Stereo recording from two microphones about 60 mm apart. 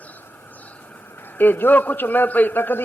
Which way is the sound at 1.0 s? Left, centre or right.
Left.